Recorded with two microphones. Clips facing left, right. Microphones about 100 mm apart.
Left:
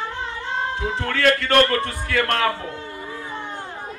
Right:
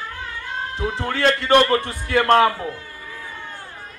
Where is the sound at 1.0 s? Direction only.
25° right (ahead or behind).